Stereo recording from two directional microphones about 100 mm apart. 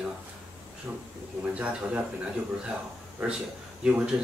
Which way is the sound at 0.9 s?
20° right (ahead or behind).